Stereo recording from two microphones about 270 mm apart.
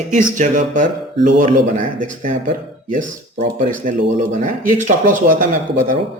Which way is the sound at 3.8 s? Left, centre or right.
Right.